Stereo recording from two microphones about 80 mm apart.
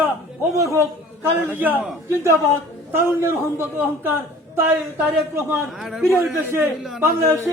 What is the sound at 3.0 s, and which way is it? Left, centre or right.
A man's voice, right.